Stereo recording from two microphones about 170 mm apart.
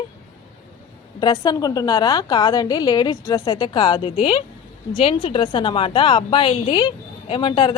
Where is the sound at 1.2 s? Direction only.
25° left (ahead or behind).